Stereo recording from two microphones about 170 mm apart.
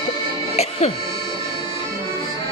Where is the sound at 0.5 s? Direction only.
40° left (ahead or behind).